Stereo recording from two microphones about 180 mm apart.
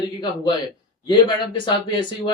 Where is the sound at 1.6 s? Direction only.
25° left (ahead or behind).